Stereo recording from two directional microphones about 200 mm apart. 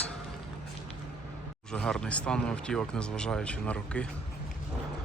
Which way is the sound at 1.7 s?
5° left (ahead or behind).